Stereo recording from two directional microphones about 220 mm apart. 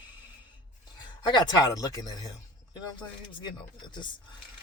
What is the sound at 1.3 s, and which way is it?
Speech, 20° left (ahead or behind).